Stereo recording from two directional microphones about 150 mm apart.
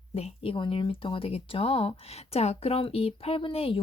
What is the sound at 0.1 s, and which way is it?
Speech, 40° left (ahead or behind).